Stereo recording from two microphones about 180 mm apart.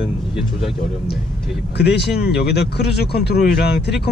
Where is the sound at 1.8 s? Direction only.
70° left (ahead or behind).